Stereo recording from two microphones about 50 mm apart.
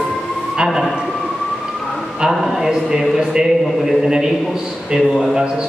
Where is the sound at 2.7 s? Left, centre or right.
Centre.